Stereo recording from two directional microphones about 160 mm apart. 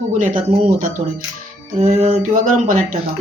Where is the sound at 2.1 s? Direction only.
55° right (ahead or behind).